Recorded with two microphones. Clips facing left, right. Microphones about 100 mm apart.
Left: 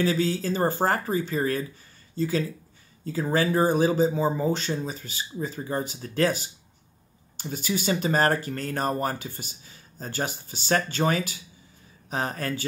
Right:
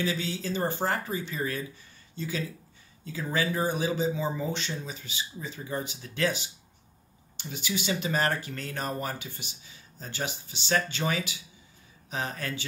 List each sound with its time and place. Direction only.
0.0 s speech: 40° left (ahead or behind)